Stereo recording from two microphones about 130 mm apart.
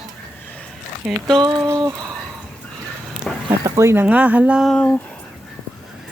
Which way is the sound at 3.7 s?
20° right (ahead or behind).